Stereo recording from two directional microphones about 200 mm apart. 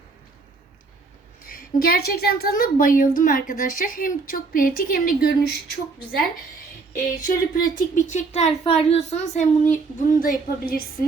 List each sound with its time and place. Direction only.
1.5 s speech: 45° left (ahead or behind)